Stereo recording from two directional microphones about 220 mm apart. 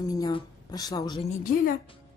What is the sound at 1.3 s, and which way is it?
Speech, 40° left (ahead or behind).